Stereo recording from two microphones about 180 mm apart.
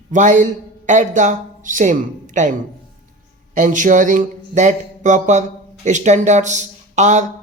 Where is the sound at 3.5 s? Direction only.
45° right (ahead or behind).